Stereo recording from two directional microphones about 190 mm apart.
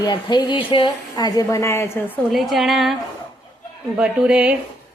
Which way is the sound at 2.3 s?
Centre (ahead or behind).